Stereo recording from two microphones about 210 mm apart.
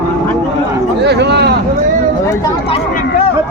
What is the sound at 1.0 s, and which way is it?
Speech, 55° right (ahead or behind).